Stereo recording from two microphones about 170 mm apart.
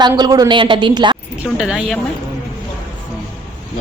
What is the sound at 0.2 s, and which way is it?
A woman's voice, 25° right (ahead or behind).